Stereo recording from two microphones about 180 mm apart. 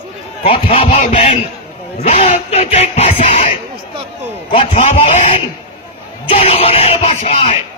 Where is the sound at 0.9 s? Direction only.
40° left (ahead or behind).